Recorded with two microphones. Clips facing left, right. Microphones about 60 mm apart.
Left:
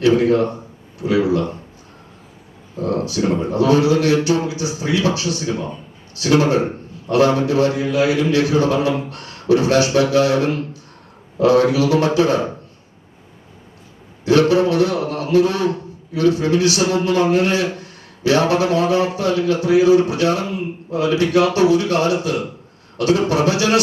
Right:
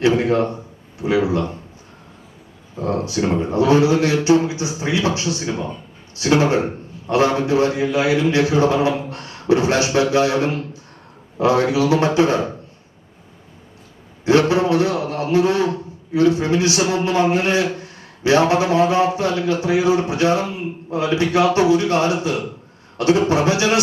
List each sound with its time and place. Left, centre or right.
0.0 s a man's voice: right
2.7 s a man's voice: right
14.3 s a man's voice: right